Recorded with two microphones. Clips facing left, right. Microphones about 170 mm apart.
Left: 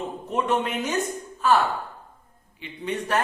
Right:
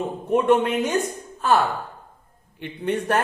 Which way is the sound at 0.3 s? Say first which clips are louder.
Right 7 dB; 55° right (ahead or behind).